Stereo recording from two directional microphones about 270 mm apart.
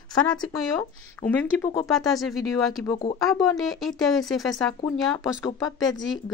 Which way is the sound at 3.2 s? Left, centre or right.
Centre.